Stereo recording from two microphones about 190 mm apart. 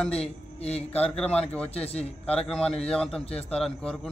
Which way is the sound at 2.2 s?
5° left (ahead or behind).